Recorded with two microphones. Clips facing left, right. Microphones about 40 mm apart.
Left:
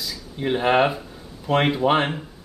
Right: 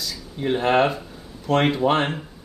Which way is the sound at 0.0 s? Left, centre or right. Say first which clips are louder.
Even; centre.